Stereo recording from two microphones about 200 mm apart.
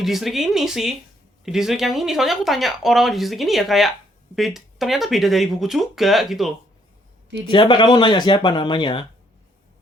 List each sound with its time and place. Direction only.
0.0 s speech: centre (ahead or behind)
7.4 s speech: 25° left (ahead or behind)